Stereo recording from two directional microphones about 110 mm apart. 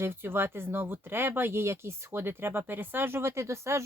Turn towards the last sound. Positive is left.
turn(degrees=-25)  # may be behind; listen again after turning